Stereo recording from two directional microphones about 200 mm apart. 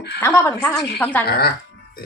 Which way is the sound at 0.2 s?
10° left (ahead or behind).